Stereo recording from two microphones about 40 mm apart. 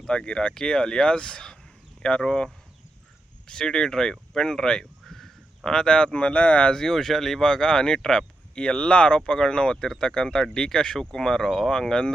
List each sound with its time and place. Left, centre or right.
0.0 s speech: left
5.0 s crow: centre
5.6 s speech: left
6.7 s speech: centre
7.4 s speech: centre